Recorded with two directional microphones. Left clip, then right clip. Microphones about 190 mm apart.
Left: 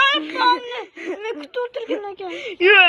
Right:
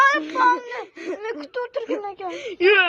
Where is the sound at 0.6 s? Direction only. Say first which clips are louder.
Left 2 dB; 10° right (ahead or behind).